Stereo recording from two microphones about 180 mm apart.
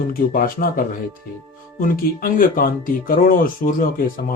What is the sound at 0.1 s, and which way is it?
Speech, 55° left (ahead or behind).